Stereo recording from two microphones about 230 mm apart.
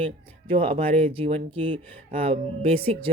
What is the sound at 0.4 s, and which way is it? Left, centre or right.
Speech, right.